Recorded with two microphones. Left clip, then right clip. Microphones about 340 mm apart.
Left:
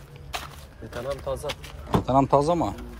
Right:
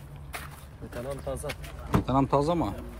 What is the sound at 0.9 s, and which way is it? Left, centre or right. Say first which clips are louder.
Speech: left 5 dB; centre.